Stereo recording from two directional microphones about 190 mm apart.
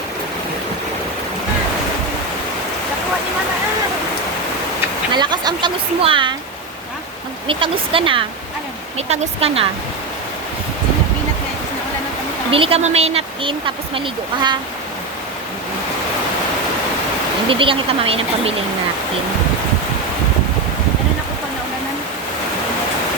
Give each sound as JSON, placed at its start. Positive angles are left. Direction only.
{"t": 5.1, "sound": "speech", "side_deg": -25}
{"t": 7.4, "sound": "speech", "side_deg": -25}
{"t": 12.5, "sound": "speech", "side_deg": -30}
{"t": 17.5, "sound": "speech", "side_deg": -25}